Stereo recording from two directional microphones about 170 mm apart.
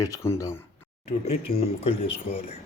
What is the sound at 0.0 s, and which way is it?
Speech, 15° left (ahead or behind).